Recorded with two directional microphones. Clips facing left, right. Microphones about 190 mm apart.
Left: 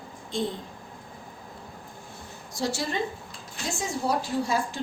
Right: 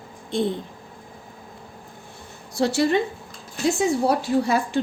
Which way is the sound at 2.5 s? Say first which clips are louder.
Right 9 dB; 65° right (ahead or behind).